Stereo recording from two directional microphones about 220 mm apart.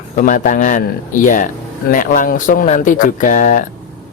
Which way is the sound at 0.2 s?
35° left (ahead or behind).